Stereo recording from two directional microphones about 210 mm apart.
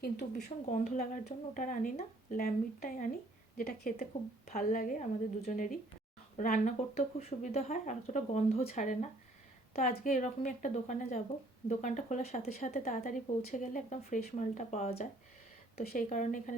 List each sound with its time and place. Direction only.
0.0 s speech: 45° left (ahead or behind)